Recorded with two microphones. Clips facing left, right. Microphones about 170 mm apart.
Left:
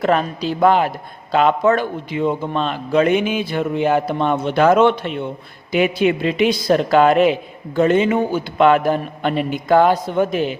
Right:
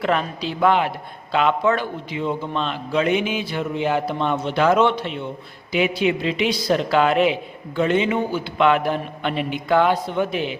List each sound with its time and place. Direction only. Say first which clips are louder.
0.0 s speech: left 4 dB; 40° left (ahead or behind)